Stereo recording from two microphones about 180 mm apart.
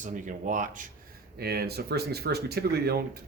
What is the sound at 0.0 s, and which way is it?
Speech, 45° right (ahead or behind).